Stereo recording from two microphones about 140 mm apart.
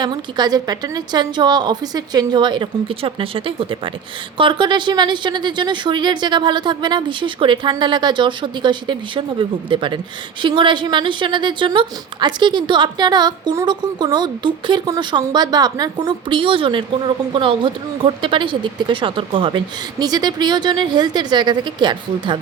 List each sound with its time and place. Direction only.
0.0 s a woman's voice: 30° right (ahead or behind)